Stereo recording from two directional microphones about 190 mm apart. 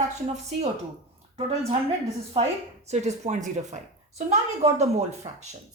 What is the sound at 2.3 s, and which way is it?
A woman's voice, 35° right (ahead or behind).